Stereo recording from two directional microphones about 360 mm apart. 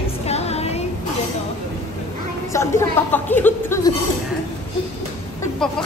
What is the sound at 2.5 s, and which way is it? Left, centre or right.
A woman's voice, centre.